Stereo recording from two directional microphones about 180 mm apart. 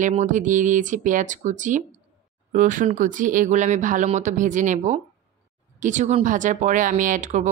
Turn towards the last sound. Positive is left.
turn(degrees=-40)  # may be behind; listen again after turning